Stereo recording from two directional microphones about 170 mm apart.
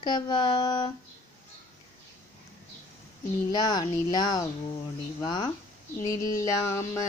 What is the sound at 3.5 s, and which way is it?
Speech, 25° left (ahead or behind).